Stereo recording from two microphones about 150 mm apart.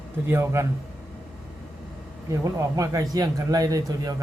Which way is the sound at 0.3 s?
15° right (ahead or behind).